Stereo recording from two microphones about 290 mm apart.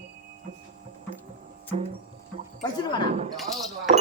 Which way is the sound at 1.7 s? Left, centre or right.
Right.